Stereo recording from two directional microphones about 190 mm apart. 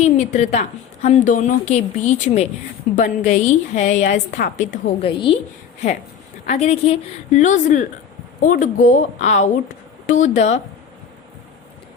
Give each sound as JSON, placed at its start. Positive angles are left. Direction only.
{"t": 0.0, "sound": "a woman's voice", "side_deg": 35}
{"t": 5.1, "sound": "a woman's voice", "side_deg": 25}
{"t": 6.5, "sound": "a woman's voice", "side_deg": 35}